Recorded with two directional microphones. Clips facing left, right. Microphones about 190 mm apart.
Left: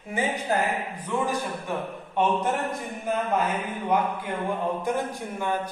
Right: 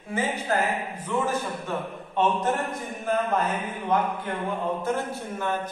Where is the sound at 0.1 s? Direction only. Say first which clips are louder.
Even; 15° left (ahead or behind).